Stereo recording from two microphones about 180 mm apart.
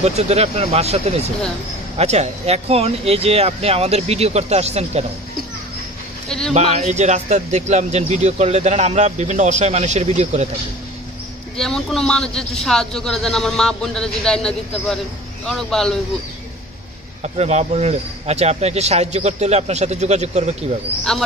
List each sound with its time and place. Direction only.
0.0 s speech: 35° right (ahead or behind)
6.2 s speech: 5° left (ahead or behind)
6.5 s speech: 40° right (ahead or behind)
11.5 s a man's voice: centre (ahead or behind)
17.2 s speech: 40° right (ahead or behind)
21.1 s a man's voice: centre (ahead or behind)